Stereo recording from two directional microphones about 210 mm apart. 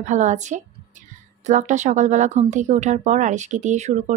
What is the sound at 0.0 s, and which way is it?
Speech, 35° right (ahead or behind).